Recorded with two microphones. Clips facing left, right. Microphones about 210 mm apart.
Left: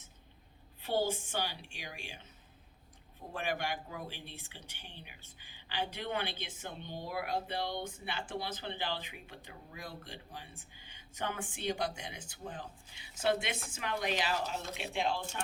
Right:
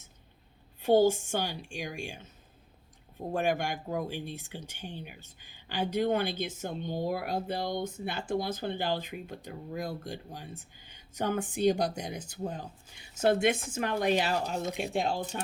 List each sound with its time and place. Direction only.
0.8 s speech: 45° right (ahead or behind)
3.3 s speech: 45° right (ahead or behind)